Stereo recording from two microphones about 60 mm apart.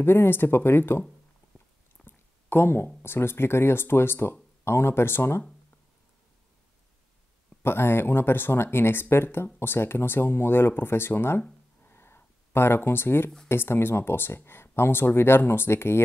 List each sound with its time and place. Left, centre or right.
0.0 s speech: left
2.0 s a sound: left
3.0 s speech: left
7.6 s speech: left
11.9 s a sound: left
13.5 s speech: left